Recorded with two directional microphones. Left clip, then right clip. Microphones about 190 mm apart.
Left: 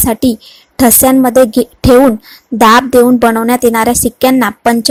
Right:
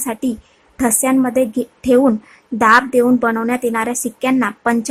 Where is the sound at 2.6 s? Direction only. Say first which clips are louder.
Left 6 dB; 25° left (ahead or behind).